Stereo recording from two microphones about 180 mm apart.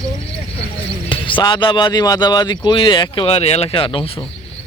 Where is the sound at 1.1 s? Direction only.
25° left (ahead or behind).